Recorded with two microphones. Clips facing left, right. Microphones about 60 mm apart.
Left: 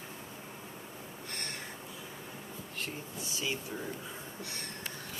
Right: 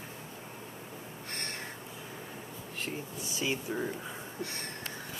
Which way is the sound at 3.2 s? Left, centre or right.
Right.